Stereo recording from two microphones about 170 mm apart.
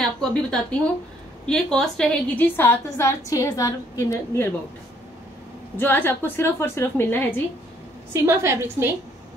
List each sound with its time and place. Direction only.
0.0 s a woman's voice: 5° left (ahead or behind)
5.8 s a woman's voice: 10° left (ahead or behind)
8.1 s a woman's voice: 15° right (ahead or behind)